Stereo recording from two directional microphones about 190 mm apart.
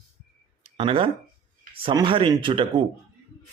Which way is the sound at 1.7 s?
25° right (ahead or behind).